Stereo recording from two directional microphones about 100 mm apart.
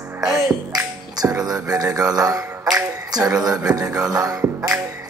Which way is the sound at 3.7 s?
40° right (ahead or behind).